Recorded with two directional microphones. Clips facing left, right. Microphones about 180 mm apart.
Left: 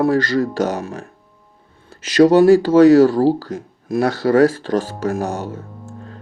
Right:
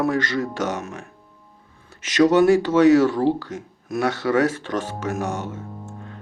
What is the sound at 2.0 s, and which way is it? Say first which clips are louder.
Speech: left 5 dB; 35° left (ahead or behind).